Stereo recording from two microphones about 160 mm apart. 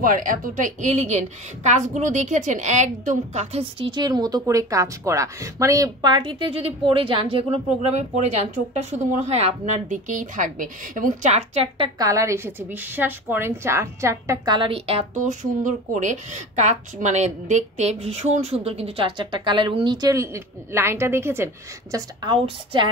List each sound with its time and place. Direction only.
0.0 s a woman's voice: 60° right (ahead or behind); by 7.4 s 35° right (ahead or behind)
8.7 s a woman's voice: 45° right (ahead or behind)
12.0 s a woman's voice: 20° right (ahead or behind); by 15.0 s 35° right (ahead or behind)
15.1 s a woman's voice: 50° right (ahead or behind); by 21.5 s 15° right (ahead or behind)
21.9 s a woman's voice: 25° right (ahead or behind)